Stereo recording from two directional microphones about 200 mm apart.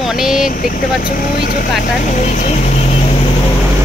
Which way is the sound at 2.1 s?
40° left (ahead or behind).